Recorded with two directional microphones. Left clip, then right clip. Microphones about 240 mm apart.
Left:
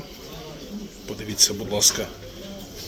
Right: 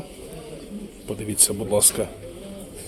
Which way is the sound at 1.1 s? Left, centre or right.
Centre.